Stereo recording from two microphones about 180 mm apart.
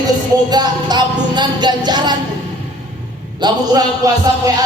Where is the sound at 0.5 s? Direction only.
20° right (ahead or behind).